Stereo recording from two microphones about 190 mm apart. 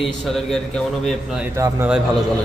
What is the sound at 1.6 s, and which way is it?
Speech, 10° right (ahead or behind).